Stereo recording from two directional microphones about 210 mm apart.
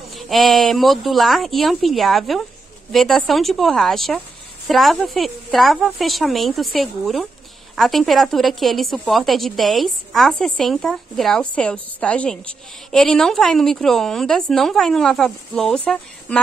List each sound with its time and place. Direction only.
0.1 s a woman's voice: centre (ahead or behind)